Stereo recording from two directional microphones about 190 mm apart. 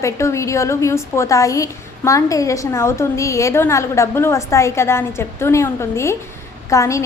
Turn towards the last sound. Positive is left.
turn(degrees=15)  # may be behind; listen again after turning